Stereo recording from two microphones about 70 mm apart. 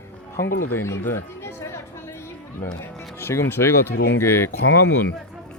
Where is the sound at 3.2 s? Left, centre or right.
Left.